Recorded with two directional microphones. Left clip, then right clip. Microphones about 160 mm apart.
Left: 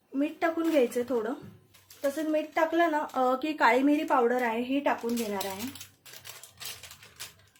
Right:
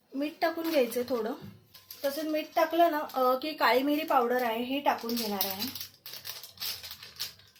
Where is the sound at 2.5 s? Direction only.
35° left (ahead or behind).